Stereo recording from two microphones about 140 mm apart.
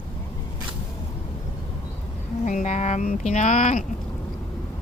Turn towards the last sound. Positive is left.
turn(degrees=60)  # may be behind; listen again after turning